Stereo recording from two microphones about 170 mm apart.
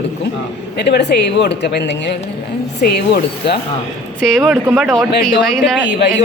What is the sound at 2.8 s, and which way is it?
Speech, 75° left (ahead or behind).